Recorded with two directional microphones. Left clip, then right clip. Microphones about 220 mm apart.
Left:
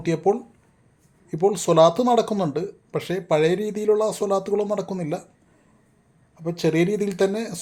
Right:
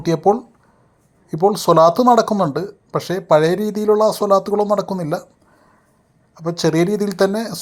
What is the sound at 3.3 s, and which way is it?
Speech, centre (ahead or behind).